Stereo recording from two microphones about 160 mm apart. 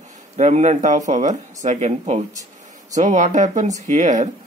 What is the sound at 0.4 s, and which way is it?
Speech, 45° right (ahead or behind).